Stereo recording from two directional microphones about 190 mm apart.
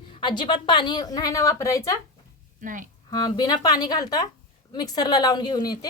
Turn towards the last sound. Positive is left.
turn(degrees=20)  # may be behind; listen again after turning